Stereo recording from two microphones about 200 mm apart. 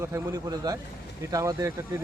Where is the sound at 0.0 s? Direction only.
15° right (ahead or behind).